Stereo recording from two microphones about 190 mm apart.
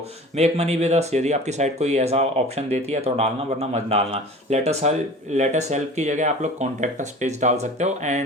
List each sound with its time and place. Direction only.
0.3 s speech: 35° right (ahead or behind)